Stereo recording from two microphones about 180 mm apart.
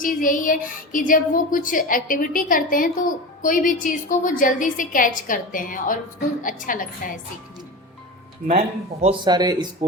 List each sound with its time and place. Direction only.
0.0 s a woman's voice: 50° left (ahead or behind)
8.4 s speech: 35° right (ahead or behind)
9.3 s speech: 20° right (ahead or behind)